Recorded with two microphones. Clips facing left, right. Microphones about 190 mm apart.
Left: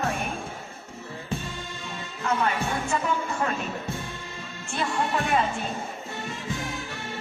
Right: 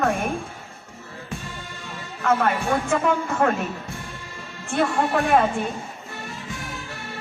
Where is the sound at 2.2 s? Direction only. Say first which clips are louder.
Right 5 dB; 55° right (ahead or behind).